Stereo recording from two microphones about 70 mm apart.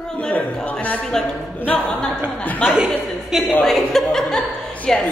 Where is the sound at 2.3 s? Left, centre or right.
Left.